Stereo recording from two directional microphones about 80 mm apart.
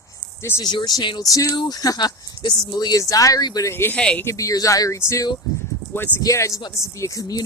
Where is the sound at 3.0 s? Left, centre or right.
Left.